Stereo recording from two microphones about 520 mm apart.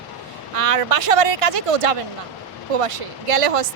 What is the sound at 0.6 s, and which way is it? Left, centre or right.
Speech, right.